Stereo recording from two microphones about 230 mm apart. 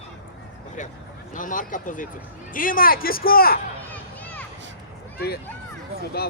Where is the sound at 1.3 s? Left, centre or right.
Left.